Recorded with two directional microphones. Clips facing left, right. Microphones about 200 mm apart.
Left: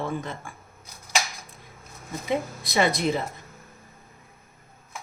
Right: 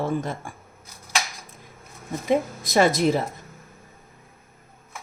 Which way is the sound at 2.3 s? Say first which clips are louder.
Right 5 dB; 45° right (ahead or behind).